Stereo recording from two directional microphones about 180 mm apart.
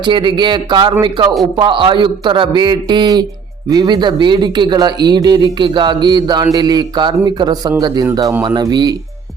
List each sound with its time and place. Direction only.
0.0 s speech: 25° right (ahead or behind)